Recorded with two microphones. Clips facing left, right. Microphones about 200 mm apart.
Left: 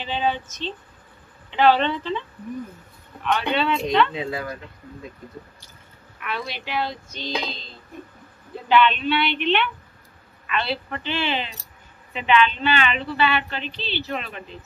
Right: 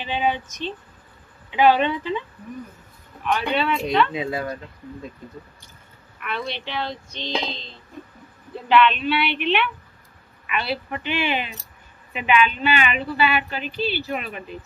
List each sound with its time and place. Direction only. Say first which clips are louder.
0.0 s speech: right 1 dB; 10° right (ahead or behind)
3.3 s speech: even; 5° right (ahead or behind)
4.2 s speech: right 2 dB; 20° right (ahead or behind)
6.1 s speech: right 1 dB; centre (ahead or behind)